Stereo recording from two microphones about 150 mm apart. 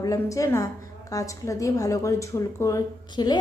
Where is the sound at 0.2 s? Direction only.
20° left (ahead or behind).